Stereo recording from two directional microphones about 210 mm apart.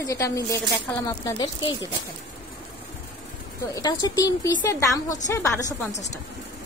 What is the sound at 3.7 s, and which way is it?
A woman's voice, 20° left (ahead or behind).